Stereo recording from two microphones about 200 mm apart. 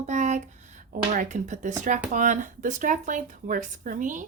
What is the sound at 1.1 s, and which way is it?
Speech, 40° right (ahead or behind).